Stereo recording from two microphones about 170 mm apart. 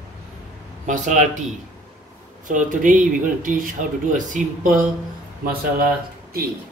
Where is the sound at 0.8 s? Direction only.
50° right (ahead or behind).